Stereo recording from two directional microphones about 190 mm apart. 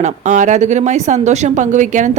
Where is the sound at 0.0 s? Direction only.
40° right (ahead or behind).